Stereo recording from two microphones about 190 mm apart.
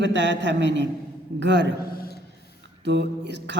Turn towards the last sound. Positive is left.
turn(degrees=-65)  # may be behind; listen again after turning